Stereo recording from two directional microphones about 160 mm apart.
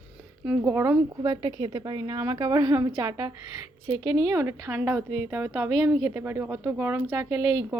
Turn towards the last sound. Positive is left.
turn(degrees=-15)  # may be behind; listen again after turning